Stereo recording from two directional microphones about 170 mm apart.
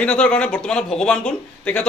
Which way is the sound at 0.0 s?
5° left (ahead or behind).